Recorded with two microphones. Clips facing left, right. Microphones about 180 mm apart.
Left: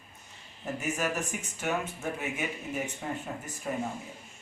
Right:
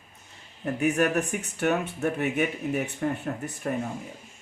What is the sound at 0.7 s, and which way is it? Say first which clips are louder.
Speech: right 8 dB; 65° right (ahead or behind).